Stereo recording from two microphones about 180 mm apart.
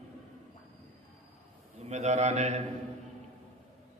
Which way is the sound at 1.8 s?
40° right (ahead or behind).